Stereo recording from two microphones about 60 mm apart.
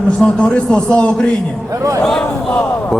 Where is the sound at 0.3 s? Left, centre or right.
Centre.